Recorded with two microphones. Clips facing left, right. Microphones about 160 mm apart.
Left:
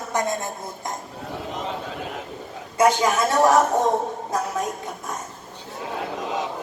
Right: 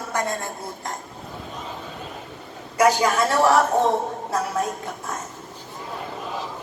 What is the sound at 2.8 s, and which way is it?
Speech, 20° left (ahead or behind).